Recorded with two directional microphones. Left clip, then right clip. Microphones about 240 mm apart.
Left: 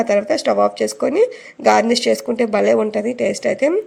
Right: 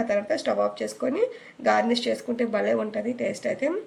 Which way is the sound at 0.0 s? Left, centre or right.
Left.